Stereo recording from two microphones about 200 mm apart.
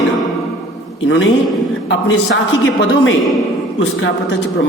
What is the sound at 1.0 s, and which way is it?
A woman's voice, 70° left (ahead or behind).